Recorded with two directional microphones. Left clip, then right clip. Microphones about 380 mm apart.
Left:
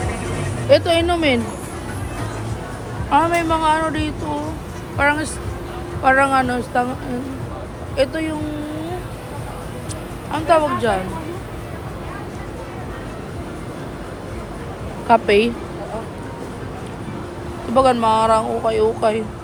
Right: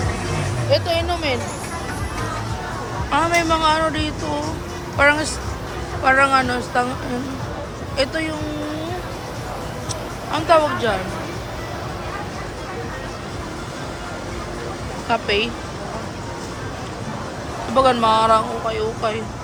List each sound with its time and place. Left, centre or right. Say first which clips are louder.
0.7 s speech: left 5 dB; centre
3.1 s speech: left 2 dB; centre
7.9 s speech: left 2 dB; centre
10.3 s speech: even; centre
15.0 s speech: left 6 dB; centre
17.7 s speech: left 1 dB; centre